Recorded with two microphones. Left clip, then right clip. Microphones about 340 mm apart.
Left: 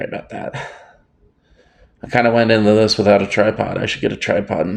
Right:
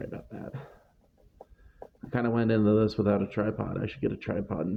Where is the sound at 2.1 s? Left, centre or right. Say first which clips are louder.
Left 15 dB; right.